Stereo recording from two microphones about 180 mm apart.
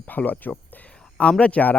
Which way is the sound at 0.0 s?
10° left (ahead or behind).